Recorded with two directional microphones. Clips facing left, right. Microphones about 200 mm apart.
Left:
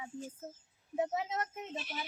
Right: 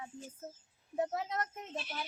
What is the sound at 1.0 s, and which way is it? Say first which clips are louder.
Speech: left 1 dB; 5° left (ahead or behind).